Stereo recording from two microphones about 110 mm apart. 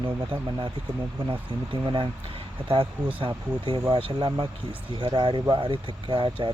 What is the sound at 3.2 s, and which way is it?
Speech, 50° right (ahead or behind).